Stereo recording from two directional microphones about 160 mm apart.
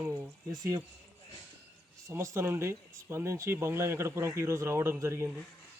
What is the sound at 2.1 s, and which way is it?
Speech, 15° right (ahead or behind).